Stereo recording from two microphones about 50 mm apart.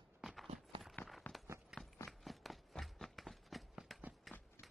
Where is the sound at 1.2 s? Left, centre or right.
Left.